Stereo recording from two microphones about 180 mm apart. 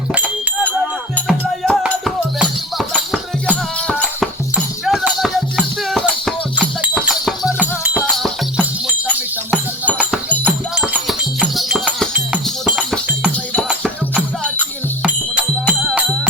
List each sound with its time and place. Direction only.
1.1 s music: centre (ahead or behind)
9.0 s music: 10° left (ahead or behind)
10.4 s music: 5° right (ahead or behind)
13.3 s music: 10° left (ahead or behind)
13.7 s music: 5° right (ahead or behind)